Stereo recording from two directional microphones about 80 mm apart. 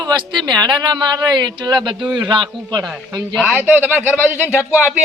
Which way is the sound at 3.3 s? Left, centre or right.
Centre.